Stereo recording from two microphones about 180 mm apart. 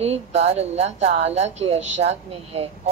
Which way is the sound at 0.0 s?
35° right (ahead or behind).